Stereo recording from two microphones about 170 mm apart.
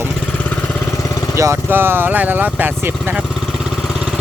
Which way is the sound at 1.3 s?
15° right (ahead or behind).